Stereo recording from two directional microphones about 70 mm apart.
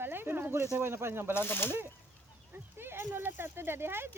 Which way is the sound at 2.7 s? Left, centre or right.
Right.